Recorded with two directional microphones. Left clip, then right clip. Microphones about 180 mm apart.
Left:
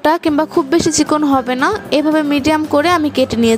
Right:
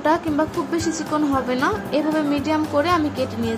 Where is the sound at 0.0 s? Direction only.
60° left (ahead or behind).